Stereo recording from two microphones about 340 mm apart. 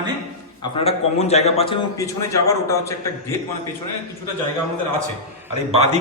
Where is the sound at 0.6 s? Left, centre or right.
Centre.